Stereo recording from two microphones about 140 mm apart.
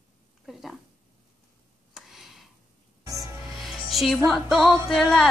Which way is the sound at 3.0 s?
25° right (ahead or behind).